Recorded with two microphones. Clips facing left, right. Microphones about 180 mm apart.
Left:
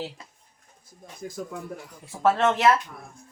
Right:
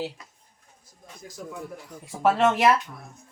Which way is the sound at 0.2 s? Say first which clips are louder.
Left 2 dB; 30° left (ahead or behind).